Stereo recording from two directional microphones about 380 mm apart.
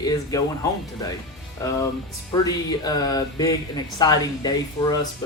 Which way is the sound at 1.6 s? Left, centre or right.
Centre.